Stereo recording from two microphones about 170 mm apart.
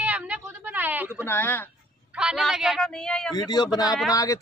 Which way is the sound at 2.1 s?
5° right (ahead or behind).